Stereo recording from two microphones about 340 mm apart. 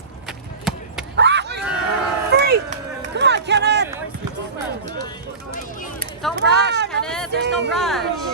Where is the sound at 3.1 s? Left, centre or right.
Right.